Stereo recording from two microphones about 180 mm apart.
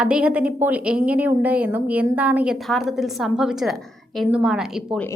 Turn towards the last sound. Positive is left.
turn(degrees=-5)  # may be behind; listen again after turning